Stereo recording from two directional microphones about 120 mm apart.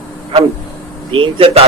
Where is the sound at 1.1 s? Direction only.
50° right (ahead or behind).